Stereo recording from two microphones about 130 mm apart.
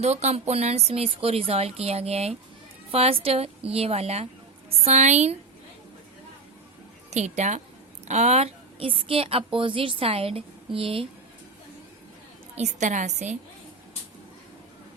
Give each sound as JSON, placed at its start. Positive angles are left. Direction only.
{"t": 0.0, "sound": "a woman's voice", "side_deg": -60}
{"t": 7.1, "sound": "a woman's voice", "side_deg": -60}
{"t": 12.5, "sound": "a woman's voice", "side_deg": -60}